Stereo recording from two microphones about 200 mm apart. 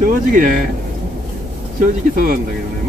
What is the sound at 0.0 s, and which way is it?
Speech, 45° right (ahead or behind).